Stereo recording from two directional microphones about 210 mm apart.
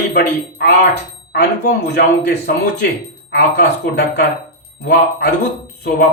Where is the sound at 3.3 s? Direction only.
50° left (ahead or behind).